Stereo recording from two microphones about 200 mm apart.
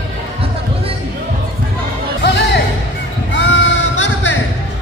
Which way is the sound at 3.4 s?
60° left (ahead or behind).